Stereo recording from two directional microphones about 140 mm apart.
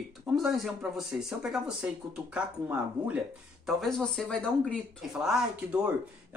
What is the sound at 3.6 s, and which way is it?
Speech, centre (ahead or behind).